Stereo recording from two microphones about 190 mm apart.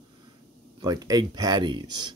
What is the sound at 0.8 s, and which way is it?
Speech, 20° right (ahead or behind).